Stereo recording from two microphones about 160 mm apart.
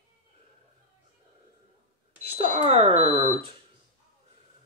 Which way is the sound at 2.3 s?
40° right (ahead or behind).